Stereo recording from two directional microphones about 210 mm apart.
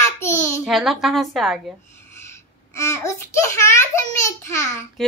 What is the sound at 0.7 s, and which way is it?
A woman's voice, centre (ahead or behind).